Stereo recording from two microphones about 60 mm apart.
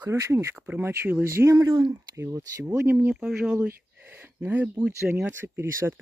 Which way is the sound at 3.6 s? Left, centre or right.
Right.